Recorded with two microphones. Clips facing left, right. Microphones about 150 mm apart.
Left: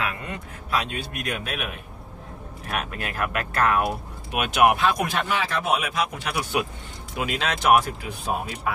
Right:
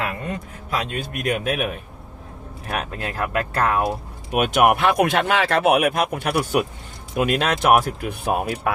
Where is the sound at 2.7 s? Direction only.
30° right (ahead or behind).